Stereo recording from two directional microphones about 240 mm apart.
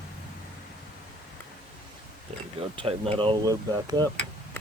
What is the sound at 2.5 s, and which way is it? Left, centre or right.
Speech, right.